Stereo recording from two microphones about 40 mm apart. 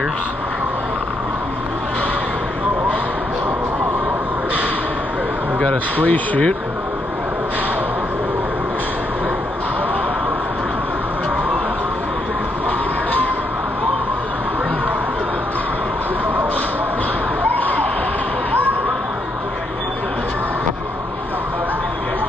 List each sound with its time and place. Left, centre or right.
6.0 s speech: left